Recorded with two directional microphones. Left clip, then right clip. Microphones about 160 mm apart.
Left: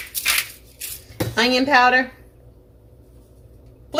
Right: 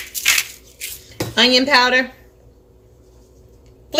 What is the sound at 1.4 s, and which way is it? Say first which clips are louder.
Speech: right 3 dB; 25° right (ahead or behind).